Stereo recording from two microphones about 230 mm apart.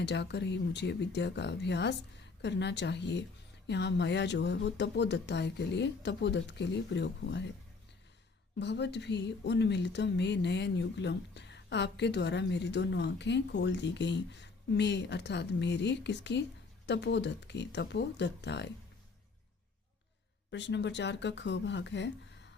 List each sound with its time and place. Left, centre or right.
0.0 s speech: left
8.5 s speech: left
20.5 s speech: left